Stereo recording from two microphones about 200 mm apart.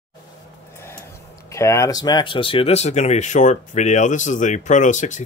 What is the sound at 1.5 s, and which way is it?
Speech, 15° left (ahead or behind).